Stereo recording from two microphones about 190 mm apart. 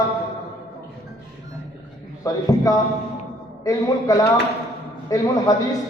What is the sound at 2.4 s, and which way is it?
A man's voice, 20° left (ahead or behind).